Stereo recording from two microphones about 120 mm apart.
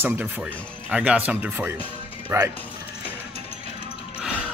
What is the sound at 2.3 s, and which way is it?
Speech, 25° right (ahead or behind).